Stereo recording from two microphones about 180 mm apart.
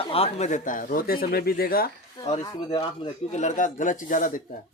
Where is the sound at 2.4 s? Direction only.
20° left (ahead or behind).